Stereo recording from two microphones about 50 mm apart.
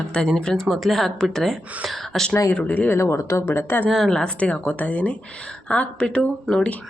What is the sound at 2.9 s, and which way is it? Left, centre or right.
Speech, left.